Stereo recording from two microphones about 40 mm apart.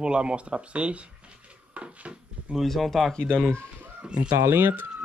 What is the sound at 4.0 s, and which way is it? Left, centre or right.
Speech, right.